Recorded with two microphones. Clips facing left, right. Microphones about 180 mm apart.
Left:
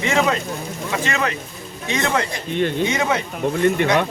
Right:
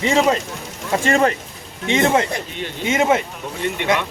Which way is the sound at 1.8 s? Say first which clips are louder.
Right 5 dB; 25° right (ahead or behind).